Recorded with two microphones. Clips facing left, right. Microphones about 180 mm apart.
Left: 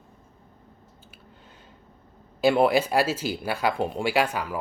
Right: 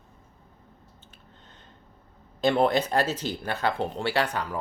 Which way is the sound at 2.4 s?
10° left (ahead or behind).